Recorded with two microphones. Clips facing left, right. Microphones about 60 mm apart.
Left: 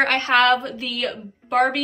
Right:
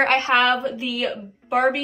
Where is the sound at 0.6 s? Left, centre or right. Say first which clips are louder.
Right 2 dB; centre.